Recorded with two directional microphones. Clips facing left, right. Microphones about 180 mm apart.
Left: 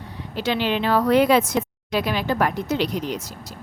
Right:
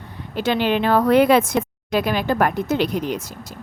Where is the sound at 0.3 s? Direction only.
50° right (ahead or behind).